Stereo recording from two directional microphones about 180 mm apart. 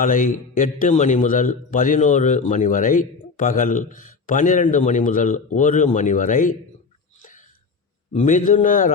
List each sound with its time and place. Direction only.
0.0 s a man's voice: 45° left (ahead or behind)
7.2 s a sound: 45° left (ahead or behind)
8.1 s a man's voice: 45° left (ahead or behind)